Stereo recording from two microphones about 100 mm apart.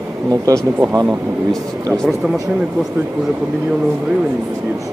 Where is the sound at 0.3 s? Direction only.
40° right (ahead or behind).